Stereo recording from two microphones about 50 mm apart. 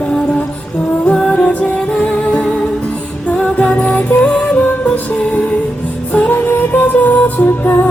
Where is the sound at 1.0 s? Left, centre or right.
Centre.